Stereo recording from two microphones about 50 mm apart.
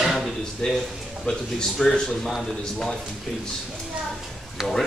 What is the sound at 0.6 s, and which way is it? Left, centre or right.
A man's voice, centre.